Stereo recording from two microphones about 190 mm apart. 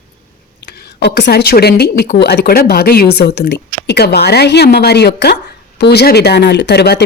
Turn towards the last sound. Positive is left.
turn(degrees=60)  # may be behind; listen again after turning